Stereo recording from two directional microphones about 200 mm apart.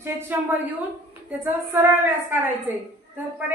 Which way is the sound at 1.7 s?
10° right (ahead or behind).